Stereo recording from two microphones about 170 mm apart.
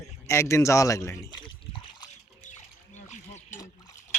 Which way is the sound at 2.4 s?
45° left (ahead or behind).